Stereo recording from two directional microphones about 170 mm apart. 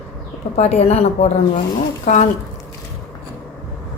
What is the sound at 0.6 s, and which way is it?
A woman's voice, 40° left (ahead or behind).